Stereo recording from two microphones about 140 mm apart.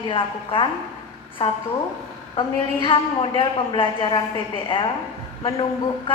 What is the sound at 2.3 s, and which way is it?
A woman's voice, 35° left (ahead or behind).